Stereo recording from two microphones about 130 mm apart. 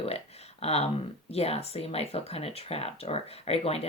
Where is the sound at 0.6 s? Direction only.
50° left (ahead or behind).